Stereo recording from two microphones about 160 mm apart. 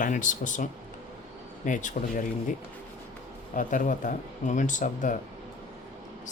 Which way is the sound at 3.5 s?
55° left (ahead or behind).